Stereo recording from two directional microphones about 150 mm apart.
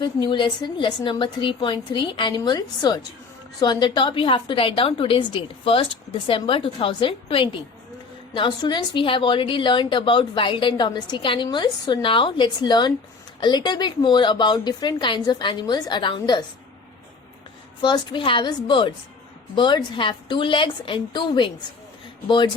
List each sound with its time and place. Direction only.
0.0 s a woman's voice: 30° left (ahead or behind)
17.8 s a woman's voice: 30° left (ahead or behind)